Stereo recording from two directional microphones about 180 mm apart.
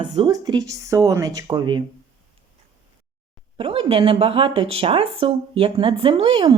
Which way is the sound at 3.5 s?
30° right (ahead or behind).